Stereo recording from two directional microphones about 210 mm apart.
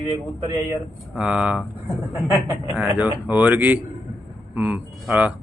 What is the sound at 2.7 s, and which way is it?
A man's voice, 5° right (ahead or behind).